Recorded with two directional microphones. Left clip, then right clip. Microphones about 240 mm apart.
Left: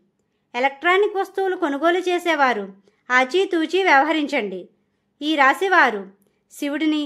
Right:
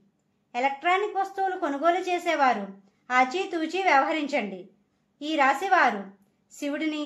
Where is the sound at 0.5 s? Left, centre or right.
Left.